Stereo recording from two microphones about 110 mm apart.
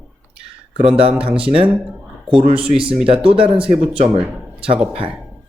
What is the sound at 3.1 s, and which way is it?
Speech, 55° right (ahead or behind).